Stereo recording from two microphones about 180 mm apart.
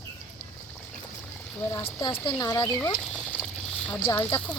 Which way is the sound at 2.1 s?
25° left (ahead or behind).